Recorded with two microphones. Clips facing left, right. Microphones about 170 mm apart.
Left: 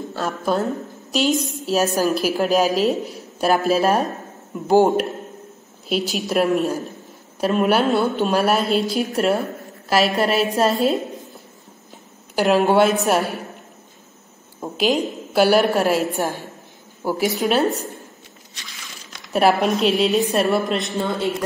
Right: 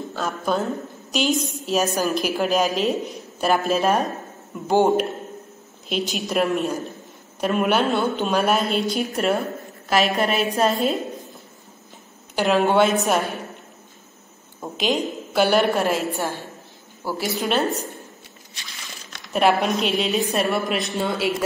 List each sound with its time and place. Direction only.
0.1 s a woman's voice: centre (ahead or behind)
12.4 s a woman's voice: 5° left (ahead or behind)
14.6 s a woman's voice: 5° left (ahead or behind)
17.0 s speech: 15° left (ahead or behind)
17.4 s a woman's voice: centre (ahead or behind)
19.3 s a woman's voice: centre (ahead or behind)